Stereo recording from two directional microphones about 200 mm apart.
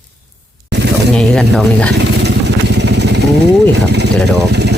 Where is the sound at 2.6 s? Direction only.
60° right (ahead or behind).